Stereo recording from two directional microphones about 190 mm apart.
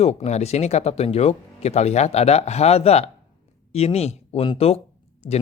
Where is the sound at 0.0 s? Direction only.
35° left (ahead or behind).